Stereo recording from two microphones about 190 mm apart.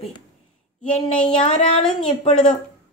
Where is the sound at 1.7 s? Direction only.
30° left (ahead or behind).